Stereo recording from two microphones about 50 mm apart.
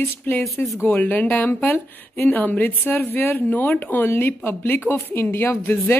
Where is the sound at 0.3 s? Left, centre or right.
Left.